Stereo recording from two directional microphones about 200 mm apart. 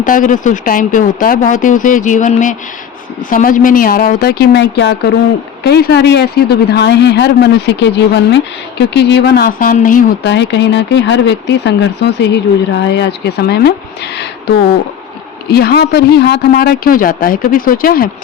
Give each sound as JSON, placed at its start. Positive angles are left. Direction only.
{"t": 0.0, "sound": "speech", "side_deg": 40}
{"t": 10.2, "sound": "speech", "side_deg": 60}
{"t": 15.5, "sound": "speech", "side_deg": 50}